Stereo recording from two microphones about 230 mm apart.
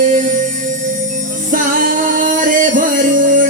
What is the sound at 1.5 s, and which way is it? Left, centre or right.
Music, right.